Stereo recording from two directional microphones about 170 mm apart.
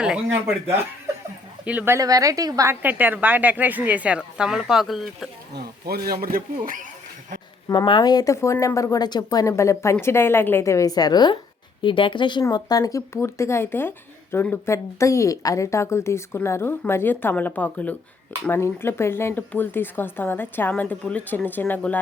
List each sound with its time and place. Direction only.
1.6 s a woman's voice: 10° right (ahead or behind)
5.5 s speech: 65° right (ahead or behind)
7.7 s a woman's voice: 25° left (ahead or behind); by 21.9 s 10° left (ahead or behind)